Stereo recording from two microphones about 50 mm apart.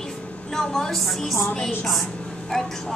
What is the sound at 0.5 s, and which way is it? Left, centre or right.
A woman's voice, centre.